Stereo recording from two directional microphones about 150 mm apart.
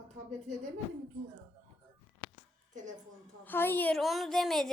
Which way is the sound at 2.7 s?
55° right (ahead or behind).